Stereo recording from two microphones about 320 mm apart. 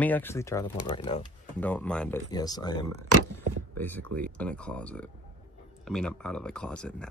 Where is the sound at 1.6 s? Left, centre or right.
Centre.